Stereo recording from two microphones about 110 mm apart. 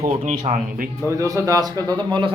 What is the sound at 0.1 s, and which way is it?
Speech, 80° right.